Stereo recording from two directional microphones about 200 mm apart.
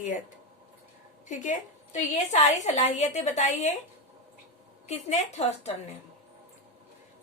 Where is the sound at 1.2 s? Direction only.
40° left (ahead or behind).